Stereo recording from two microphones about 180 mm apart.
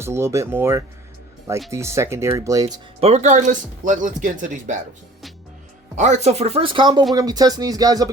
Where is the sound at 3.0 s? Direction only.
35° right (ahead or behind).